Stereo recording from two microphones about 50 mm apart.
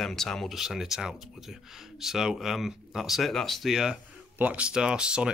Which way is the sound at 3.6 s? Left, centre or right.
Centre.